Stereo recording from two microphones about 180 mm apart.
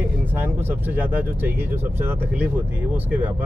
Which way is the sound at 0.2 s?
10° right (ahead or behind).